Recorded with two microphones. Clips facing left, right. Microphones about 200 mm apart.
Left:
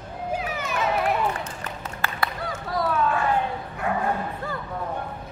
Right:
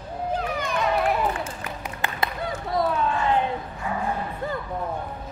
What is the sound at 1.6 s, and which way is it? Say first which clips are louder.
Clapping: right 1 dB; 15° right (ahead or behind).